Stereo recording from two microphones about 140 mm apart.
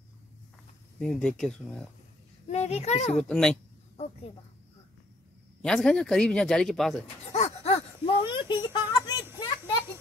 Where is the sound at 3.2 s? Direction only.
5° left (ahead or behind).